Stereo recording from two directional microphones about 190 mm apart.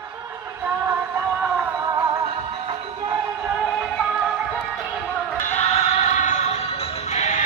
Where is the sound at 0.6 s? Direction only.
10° right (ahead or behind).